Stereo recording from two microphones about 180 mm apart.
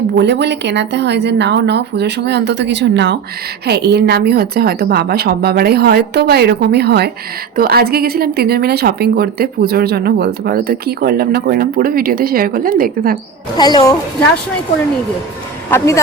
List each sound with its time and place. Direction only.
0.2 s speech: 70° right (ahead or behind)
3.7 s a woman's voice: 65° right (ahead or behind)
13.6 s a woman's voice: 20° left (ahead or behind)